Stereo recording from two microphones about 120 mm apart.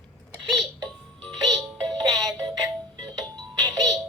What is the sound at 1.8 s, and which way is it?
Music, 35° right (ahead or behind).